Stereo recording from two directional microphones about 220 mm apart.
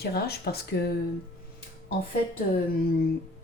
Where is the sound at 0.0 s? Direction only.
45° left (ahead or behind).